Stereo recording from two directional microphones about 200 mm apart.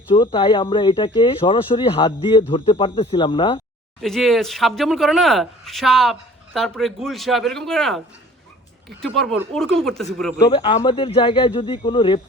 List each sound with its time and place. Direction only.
0.1 s speech: 25° left (ahead or behind)
4.0 s speech: centre (ahead or behind)
10.4 s speech: 25° left (ahead or behind)